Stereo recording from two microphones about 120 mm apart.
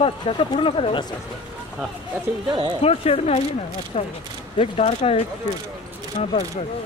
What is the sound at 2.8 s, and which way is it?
Speech, 60° left (ahead or behind).